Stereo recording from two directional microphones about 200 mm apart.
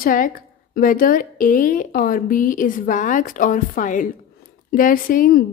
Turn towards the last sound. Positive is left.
turn(degrees=45)  # may be behind; listen again after turning